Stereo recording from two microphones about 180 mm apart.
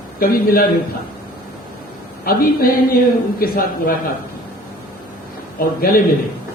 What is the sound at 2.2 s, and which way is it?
A woman's voice, 55° left (ahead or behind).